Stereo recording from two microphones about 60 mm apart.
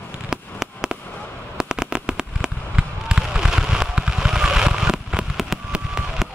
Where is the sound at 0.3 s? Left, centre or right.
Centre.